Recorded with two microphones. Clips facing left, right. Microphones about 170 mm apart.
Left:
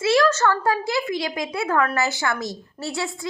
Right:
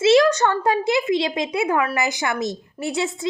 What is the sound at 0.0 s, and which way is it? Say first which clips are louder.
Speech: right 3 dB; 20° right (ahead or behind).